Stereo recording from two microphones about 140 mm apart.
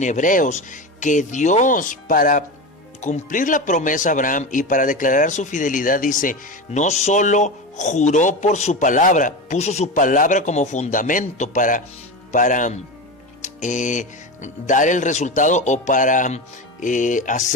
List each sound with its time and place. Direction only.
0.0 s speech: 65° left (ahead or behind)